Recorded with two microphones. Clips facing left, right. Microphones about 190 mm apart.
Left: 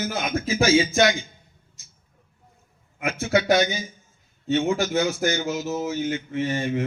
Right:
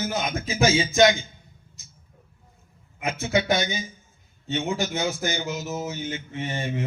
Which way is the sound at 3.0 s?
20° right (ahead or behind).